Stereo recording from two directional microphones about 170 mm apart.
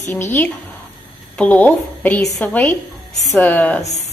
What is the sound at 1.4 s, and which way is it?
A woman's voice, 10° left (ahead or behind).